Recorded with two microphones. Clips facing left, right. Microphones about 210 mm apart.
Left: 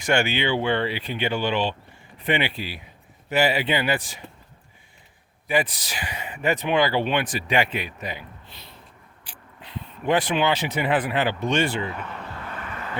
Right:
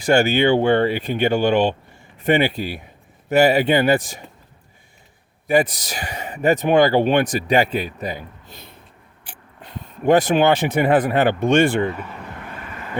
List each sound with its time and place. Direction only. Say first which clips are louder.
0.0 s speech: right 7 dB; 40° right (ahead or behind)
5.5 s speech: right 6 dB; 45° right (ahead or behind)
11.9 s speech: right 5 dB; 5° right (ahead or behind)